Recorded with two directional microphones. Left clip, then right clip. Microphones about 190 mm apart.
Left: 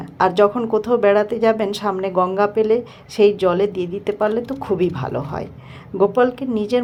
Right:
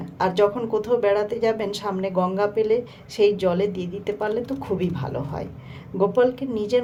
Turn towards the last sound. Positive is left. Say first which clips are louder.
# left 2 dB
turn(degrees=25)  # may be behind; listen again after turning